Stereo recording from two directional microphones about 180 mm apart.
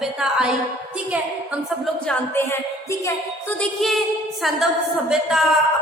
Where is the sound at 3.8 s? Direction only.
Centre (ahead or behind).